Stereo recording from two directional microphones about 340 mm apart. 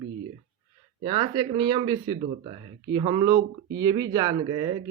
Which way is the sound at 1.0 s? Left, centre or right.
Centre.